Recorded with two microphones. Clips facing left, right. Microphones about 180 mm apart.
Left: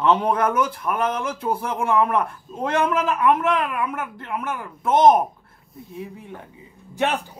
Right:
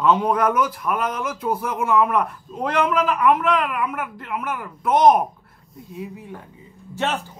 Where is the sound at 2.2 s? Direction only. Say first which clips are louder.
Right 1 dB; 25° left (ahead or behind).